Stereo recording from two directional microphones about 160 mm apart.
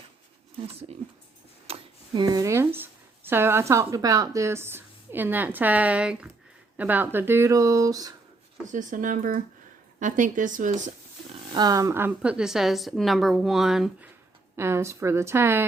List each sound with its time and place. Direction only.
0.5 s speech: 40° right (ahead or behind)
1.6 s tick-tock: 40° right (ahead or behind)
2.2 s a woman's voice: 20° right (ahead or behind)
8.6 s a woman's voice: 50° right (ahead or behind)
11.5 s a woman's voice: 25° right (ahead or behind); by 14.1 s centre (ahead or behind)
14.5 s a woman's voice: 15° right (ahead or behind)